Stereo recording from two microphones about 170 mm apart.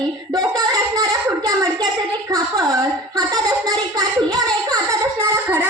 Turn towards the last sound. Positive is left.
turn(degrees=-15)  # may be behind; listen again after turning